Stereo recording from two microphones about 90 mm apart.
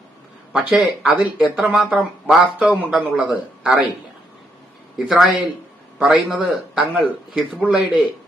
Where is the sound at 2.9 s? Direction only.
10° right (ahead or behind).